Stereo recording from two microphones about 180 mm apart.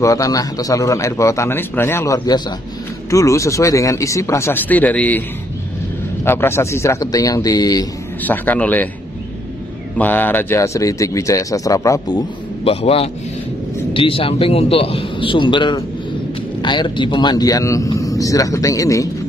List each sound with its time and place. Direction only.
0.0 s speech: 20° left (ahead or behind)
6.2 s speech: 15° left (ahead or behind)
8.2 s speech: 10° left (ahead or behind)
9.9 s speech: 10° left (ahead or behind)